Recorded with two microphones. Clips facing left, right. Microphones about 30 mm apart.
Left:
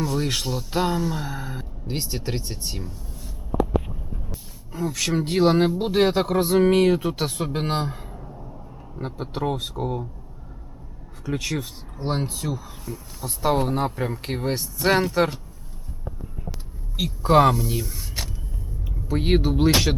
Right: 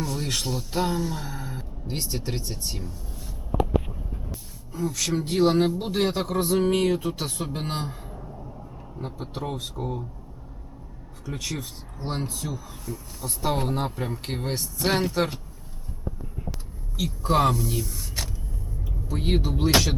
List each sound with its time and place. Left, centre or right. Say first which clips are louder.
0.0 s a sound: left 5 dB; centre
0.4 s speech: left 2 dB; centre
3.6 s a sound: left 2 dB; centre
4.7 s speech: left 2 dB; centre
7.5 s a man's voice: left 5 dB; left
8.1 s a sound: even; centre
9.0 s speech: left 5 dB; left
11.3 s speech: left 5 dB; centre
17.0 s speech: left 5 dB; centre
18.9 s speech: left 5 dB; left